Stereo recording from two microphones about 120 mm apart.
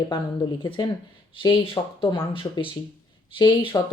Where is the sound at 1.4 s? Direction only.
45° left (ahead or behind).